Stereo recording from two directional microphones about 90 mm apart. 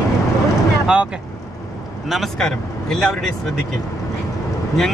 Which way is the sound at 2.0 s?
Centre (ahead or behind).